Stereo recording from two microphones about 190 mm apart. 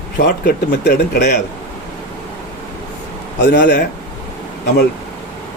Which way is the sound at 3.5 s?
55° left (ahead or behind).